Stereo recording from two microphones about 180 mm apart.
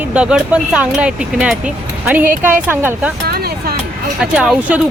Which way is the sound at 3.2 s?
60° right (ahead or behind).